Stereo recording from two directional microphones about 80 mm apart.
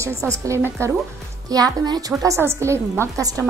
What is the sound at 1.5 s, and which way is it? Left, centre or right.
Speech, right.